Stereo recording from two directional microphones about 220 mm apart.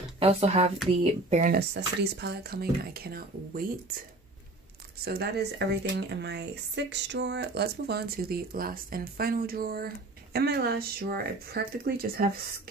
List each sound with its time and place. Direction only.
0.2 s speech: 30° right (ahead or behind)
1.3 s speech: 40° right (ahead or behind)